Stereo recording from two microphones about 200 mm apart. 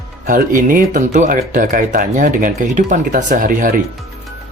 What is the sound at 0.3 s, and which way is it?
Speech, 45° right (ahead or behind).